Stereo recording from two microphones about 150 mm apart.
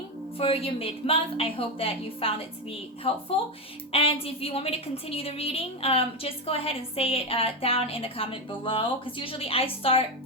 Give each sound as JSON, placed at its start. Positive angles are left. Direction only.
{"t": 0.3, "sound": "a woman's voice", "side_deg": 40}